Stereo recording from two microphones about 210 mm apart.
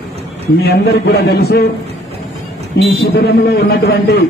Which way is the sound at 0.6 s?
50° left (ahead or behind).